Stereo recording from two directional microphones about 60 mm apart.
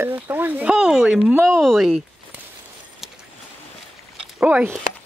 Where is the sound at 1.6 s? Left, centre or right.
Centre.